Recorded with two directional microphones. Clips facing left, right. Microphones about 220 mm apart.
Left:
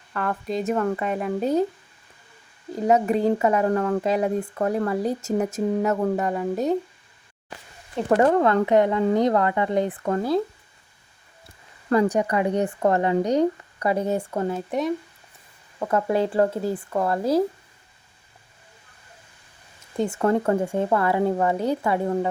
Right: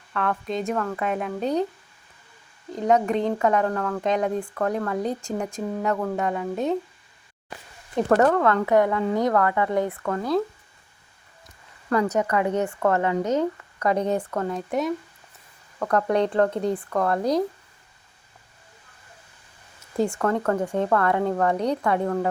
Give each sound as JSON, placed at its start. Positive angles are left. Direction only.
{"t": 0.1, "sound": "speech", "side_deg": 5}
{"t": 2.7, "sound": "speech", "side_deg": 5}
{"t": 3.7, "sound": "speech", "side_deg": 20}
{"t": 4.0, "sound": "speech", "side_deg": 5}
{"t": 8.2, "sound": "speech", "side_deg": 25}
{"t": 11.4, "sound": "a sound", "side_deg": 30}
{"t": 12.3, "sound": "speech", "side_deg": 15}
{"t": 20.0, "sound": "speech", "side_deg": 5}